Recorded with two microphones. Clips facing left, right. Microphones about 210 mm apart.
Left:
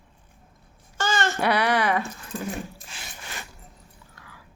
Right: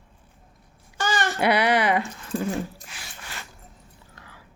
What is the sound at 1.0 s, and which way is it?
A child's voice, 15° right (ahead or behind).